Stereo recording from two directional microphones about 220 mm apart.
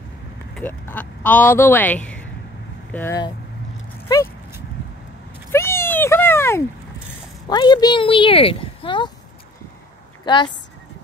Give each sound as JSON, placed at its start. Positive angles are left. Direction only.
{"t": 0.6, "sound": "speech", "side_deg": 10}
{"t": 5.5, "sound": "cat", "side_deg": 10}
{"t": 7.4, "sound": "speech", "side_deg": 20}
{"t": 10.2, "sound": "a woman's voice", "side_deg": 20}